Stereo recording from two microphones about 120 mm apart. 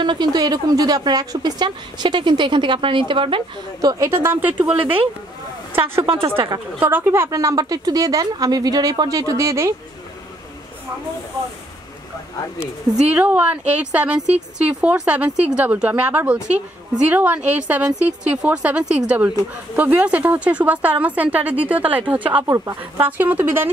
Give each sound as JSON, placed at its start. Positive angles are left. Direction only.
{"t": 0.0, "sound": "a woman's voice", "side_deg": -35}
{"t": 3.8, "sound": "a woman's voice", "side_deg": -25}
{"t": 6.0, "sound": "a woman's voice", "side_deg": -45}
{"t": 6.8, "sound": "a woman's voice", "side_deg": -15}
{"t": 12.9, "sound": "a woman's voice", "side_deg": -10}
{"t": 22.4, "sound": "a woman's voice", "side_deg": -25}
{"t": 22.9, "sound": "a woman's voice", "side_deg": -15}